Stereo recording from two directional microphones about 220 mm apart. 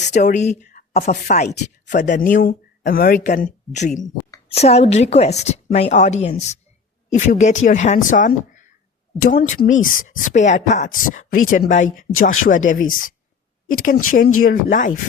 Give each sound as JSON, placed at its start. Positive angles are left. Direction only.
{"t": 0.1, "sound": "a woman's voice", "side_deg": 35}
{"t": 4.0, "sound": "a sound", "side_deg": 20}
{"t": 4.5, "sound": "a woman's voice", "side_deg": 30}
{"t": 13.8, "sound": "speech", "side_deg": 40}